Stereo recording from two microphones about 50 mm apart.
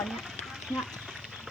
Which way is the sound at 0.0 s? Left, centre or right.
Centre.